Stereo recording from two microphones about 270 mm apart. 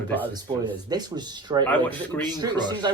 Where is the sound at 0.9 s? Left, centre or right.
Centre.